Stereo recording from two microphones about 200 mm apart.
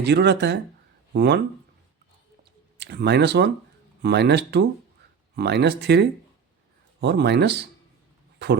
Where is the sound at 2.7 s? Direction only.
55° right (ahead or behind).